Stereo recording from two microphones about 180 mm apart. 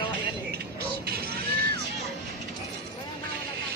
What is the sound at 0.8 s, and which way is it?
Music, 60° right (ahead or behind).